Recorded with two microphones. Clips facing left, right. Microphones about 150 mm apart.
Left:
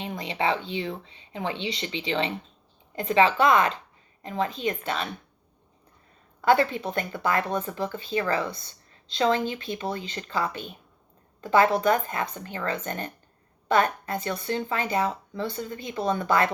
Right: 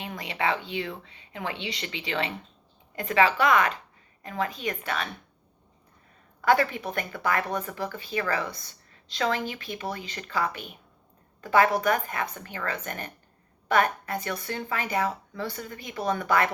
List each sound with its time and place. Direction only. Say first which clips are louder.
0.0 s speech: left 2 dB; 25° left (ahead or behind)
6.4 s speech: left 2 dB; 25° left (ahead or behind)